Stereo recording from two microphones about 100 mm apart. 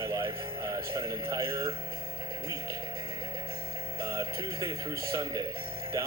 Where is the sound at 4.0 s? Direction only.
30° right (ahead or behind).